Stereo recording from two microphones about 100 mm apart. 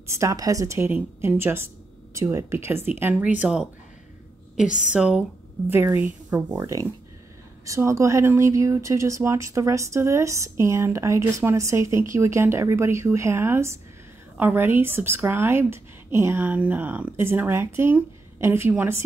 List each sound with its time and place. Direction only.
0.0 s a woman's voice: 30° right (ahead or behind)
0.8 s a woman's voice: 20° right (ahead or behind)
4.6 s a woman's voice: 10° right (ahead or behind)
5.7 s speech: 25° right (ahead or behind)
6.3 s a woman's voice: 35° right (ahead or behind)